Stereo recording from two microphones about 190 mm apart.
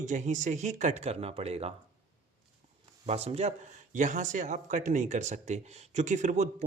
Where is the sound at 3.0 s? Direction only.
35° right (ahead or behind).